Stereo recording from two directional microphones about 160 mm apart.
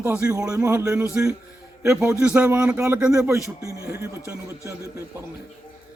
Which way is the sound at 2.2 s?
10° right (ahead or behind).